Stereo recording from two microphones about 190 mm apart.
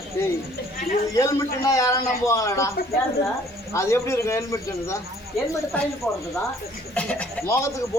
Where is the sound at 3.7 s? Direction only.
15° left (ahead or behind).